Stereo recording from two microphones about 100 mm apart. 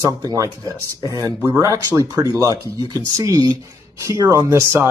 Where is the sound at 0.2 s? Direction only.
35° right (ahead or behind).